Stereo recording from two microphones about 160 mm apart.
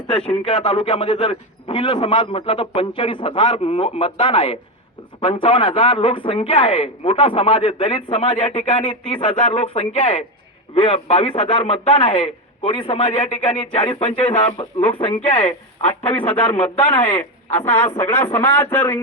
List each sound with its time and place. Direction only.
0.1 s speech: 5° left (ahead or behind)
0.4 s speech: 35° left (ahead or behind)
16.3 s speech: 35° left (ahead or behind)
16.8 s a man's voice: 10° left (ahead or behind)